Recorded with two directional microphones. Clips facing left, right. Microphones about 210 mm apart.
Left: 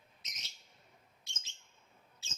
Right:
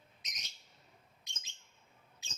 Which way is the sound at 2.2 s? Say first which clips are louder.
Left 1 dB; 15° right (ahead or behind).